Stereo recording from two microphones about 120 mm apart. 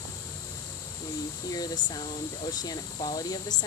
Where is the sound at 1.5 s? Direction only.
35° left (ahead or behind).